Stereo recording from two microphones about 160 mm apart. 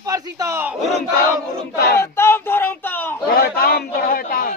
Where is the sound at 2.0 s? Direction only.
15° left (ahead or behind).